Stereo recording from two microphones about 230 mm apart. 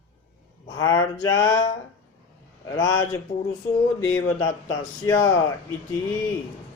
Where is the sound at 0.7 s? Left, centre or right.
Centre.